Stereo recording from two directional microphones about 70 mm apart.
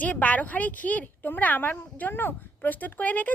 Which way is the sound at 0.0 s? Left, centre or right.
Left.